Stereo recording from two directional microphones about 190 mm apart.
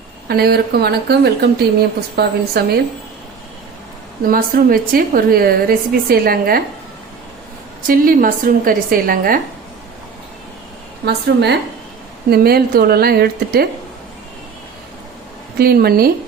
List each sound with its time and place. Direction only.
0.3 s speech: 55° right (ahead or behind)
4.3 s a woman's voice: 50° right (ahead or behind)
7.9 s a woman's voice: 45° right (ahead or behind)
11.0 s speech: 60° right (ahead or behind)
15.5 s a woman's voice: 55° right (ahead or behind)